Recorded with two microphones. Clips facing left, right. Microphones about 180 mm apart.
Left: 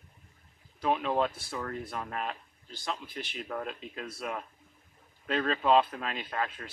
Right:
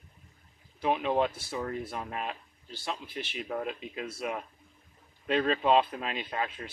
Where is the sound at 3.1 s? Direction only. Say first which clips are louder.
Right 2 dB; 45° left (ahead or behind).